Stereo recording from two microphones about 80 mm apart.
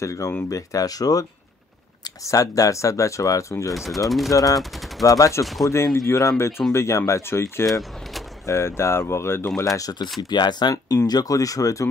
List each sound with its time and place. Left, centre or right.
0.0 s speech: left
2.2 s speech: left
3.7 s speech: centre
4.3 s speech: left
9.6 s speech: left
10.3 s speech: left